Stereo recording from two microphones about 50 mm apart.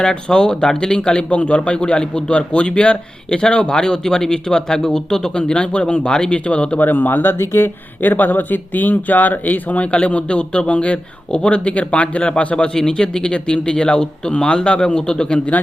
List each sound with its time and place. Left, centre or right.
0.0 s speech: centre
6.7 s speech: left
7.3 s speech: left
8.0 s speech: left; by 15.4 s centre